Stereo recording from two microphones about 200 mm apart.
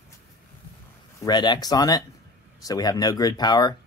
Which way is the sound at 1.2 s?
20° left (ahead or behind).